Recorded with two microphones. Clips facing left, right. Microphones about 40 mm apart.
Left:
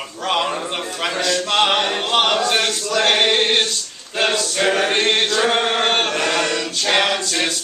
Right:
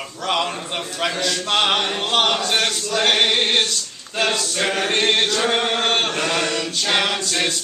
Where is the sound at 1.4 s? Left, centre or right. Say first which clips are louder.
Left 1 dB; centre.